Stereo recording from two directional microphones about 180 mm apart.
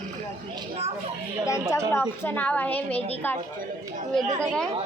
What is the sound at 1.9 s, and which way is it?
A woman's voice, 10° left (ahead or behind).